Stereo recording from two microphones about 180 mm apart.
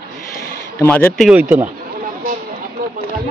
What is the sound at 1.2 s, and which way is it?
Speech, 10° right (ahead or behind).